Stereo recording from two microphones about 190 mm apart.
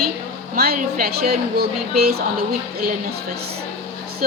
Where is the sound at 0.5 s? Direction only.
50° right (ahead or behind).